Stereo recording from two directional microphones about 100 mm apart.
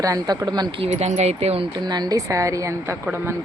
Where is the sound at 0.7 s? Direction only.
80° right.